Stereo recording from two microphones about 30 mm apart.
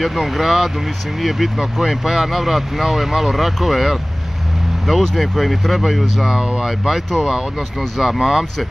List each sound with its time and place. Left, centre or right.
0.0 s speech: centre
6.2 s speech: right